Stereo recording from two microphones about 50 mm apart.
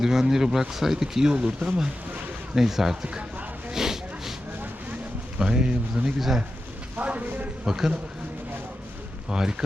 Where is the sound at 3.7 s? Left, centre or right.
Centre.